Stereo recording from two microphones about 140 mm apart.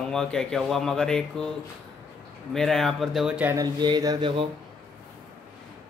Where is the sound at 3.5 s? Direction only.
25° right (ahead or behind).